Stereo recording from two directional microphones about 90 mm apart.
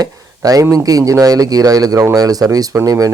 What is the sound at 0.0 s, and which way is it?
Speech, 40° right (ahead or behind).